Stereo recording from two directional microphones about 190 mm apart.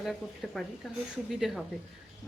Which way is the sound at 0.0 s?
Centre (ahead or behind).